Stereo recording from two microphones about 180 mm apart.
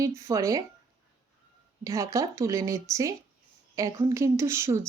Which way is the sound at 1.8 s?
20° right (ahead or behind).